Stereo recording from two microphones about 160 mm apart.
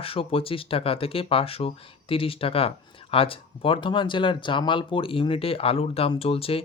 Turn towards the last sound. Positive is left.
turn(degrees=35)  # may be behind; listen again after turning